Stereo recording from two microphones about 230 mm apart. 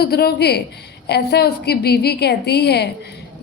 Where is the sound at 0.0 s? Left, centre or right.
Left.